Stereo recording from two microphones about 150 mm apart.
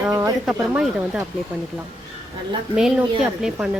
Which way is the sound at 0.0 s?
20° right (ahead or behind).